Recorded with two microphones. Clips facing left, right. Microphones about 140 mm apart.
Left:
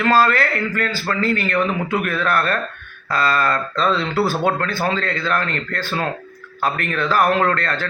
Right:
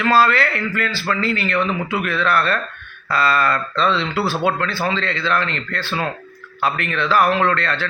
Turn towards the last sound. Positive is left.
turn(degrees=40)  # may be behind; listen again after turning